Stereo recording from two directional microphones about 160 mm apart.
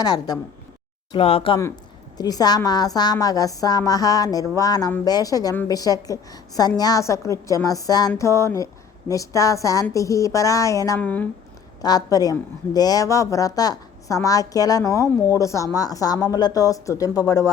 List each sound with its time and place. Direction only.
0.0 s speech: 25° left (ahead or behind)
1.1 s speech: 35° left (ahead or behind)
1.5 s speech: 25° left (ahead or behind)
11.0 s speech: 10° left (ahead or behind)
11.8 s speech: 25° left (ahead or behind)